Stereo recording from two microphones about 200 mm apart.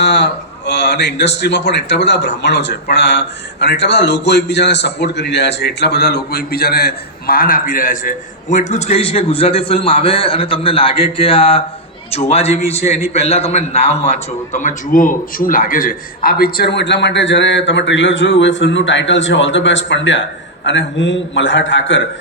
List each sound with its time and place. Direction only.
0.0 s a man's voice: 60° left (ahead or behind)